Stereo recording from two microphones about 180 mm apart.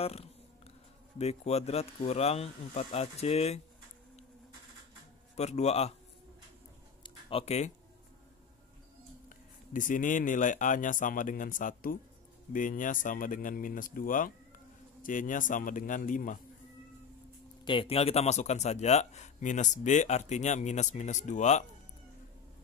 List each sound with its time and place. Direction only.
0.0 s speech: 35° left (ahead or behind)
5.3 s speech: 40° left (ahead or behind)
7.0 s a sound: 30° left (ahead or behind)
9.7 s speech: 45° left (ahead or behind)
17.6 s speech: 30° left (ahead or behind)